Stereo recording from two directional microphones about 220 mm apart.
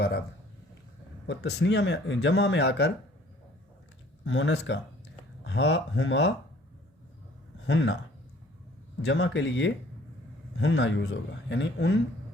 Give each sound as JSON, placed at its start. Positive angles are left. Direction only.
{"t": 1.3, "sound": "speech", "side_deg": 50}
{"t": 4.2, "sound": "speech", "side_deg": 55}
{"t": 7.7, "sound": "speech", "side_deg": 55}
{"t": 9.0, "sound": "speech", "side_deg": 55}